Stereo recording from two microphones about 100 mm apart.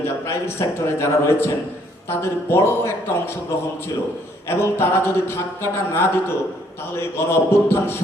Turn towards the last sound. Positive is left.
turn(degrees=25)  # may be behind; listen again after turning